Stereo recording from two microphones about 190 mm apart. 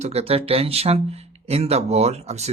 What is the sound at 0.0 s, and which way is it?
Speech, 35° right (ahead or behind).